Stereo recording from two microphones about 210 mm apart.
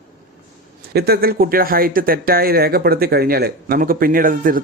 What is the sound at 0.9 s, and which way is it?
Speech, 50° right (ahead or behind).